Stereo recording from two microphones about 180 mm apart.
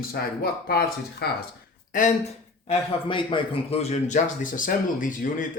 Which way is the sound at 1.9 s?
45° left (ahead or behind).